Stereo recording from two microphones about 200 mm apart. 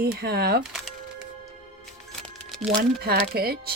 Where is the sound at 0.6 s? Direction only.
Centre (ahead or behind).